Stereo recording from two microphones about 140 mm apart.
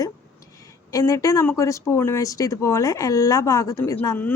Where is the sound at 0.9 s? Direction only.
25° left (ahead or behind).